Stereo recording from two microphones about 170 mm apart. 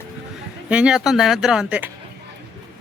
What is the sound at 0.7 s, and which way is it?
Speech, 5° right (ahead or behind).